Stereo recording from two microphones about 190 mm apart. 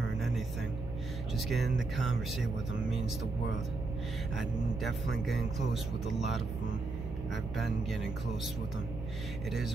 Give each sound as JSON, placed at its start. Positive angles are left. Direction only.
{"t": 1.5, "sound": "speech", "side_deg": 0}
{"t": 4.4, "sound": "speech", "side_deg": 0}
{"t": 7.5, "sound": "speech", "side_deg": 0}